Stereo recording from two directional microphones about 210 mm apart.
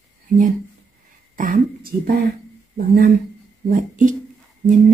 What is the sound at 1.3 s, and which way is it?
Speech, 40° right (ahead or behind).